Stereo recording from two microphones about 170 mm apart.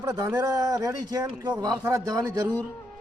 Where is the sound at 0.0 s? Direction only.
15° right (ahead or behind).